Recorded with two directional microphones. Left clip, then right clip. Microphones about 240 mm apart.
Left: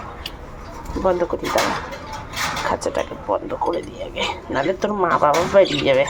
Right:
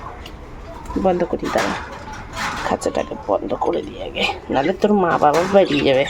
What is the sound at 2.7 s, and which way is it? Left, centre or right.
Speech, centre.